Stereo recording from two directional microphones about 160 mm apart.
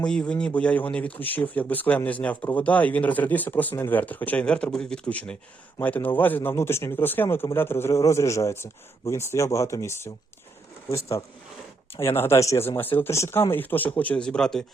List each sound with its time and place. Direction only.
0.0 s speech: 5° left (ahead or behind)
12.1 s speech: 15° left (ahead or behind)